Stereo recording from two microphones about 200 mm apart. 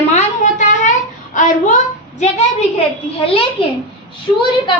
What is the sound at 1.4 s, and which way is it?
A woman's voice, 40° left (ahead or behind).